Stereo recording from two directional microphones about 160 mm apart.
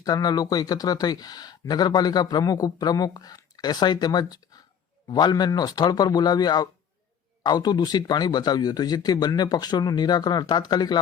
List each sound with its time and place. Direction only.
0.0 s speech: 25° left (ahead or behind)